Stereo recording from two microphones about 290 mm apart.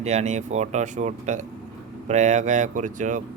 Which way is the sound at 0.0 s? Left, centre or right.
Right.